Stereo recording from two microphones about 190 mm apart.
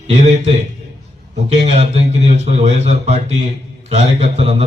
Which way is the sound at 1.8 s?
35° right (ahead or behind).